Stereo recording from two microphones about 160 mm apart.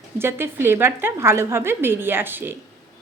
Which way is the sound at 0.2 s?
15° right (ahead or behind).